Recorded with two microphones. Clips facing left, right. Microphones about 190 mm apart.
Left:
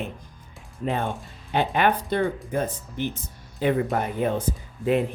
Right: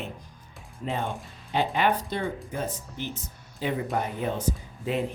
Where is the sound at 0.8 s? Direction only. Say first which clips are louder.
Left 4 dB; 55° left (ahead or behind).